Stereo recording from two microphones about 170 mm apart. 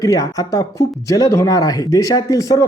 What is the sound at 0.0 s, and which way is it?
Speech, 20° left (ahead or behind).